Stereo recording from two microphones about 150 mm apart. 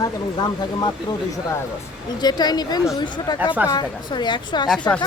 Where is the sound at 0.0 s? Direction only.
25° left (ahead or behind).